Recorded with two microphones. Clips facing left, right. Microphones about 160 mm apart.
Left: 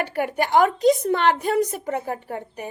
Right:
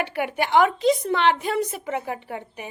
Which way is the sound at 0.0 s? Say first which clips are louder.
Left 2 dB; 40° left (ahead or behind).